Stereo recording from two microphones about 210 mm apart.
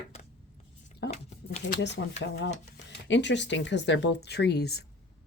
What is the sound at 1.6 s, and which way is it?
Speech, 55° left (ahead or behind).